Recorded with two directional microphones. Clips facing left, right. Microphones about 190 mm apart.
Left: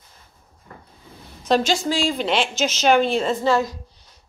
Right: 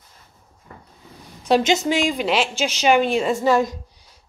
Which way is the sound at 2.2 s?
5° right (ahead or behind).